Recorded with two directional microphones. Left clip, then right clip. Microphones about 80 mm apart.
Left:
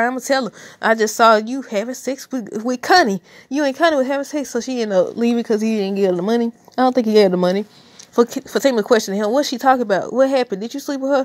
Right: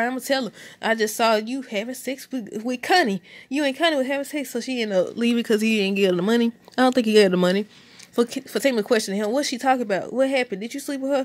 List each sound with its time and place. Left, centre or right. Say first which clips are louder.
0.0 s speech: left 5 dB; left
0.7 s a woman's voice: left 7 dB; left
5.0 s speech: left 5 dB; centre
5.4 s speech: left 2 dB; right
6.3 s speech: left 3 dB; centre
8.2 s speech: left 6 dB; left